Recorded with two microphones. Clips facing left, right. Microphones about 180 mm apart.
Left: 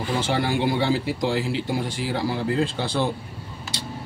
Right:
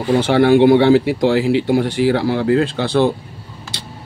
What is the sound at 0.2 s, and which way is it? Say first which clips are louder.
A man's voice: right 13 dB; 65° right (ahead or behind).